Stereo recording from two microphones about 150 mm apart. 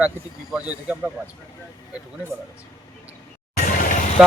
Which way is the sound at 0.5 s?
10° right (ahead or behind).